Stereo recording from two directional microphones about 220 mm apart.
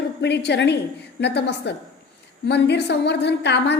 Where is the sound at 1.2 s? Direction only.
50° left (ahead or behind).